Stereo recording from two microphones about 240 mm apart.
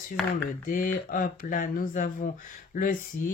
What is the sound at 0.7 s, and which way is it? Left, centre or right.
Speech, left.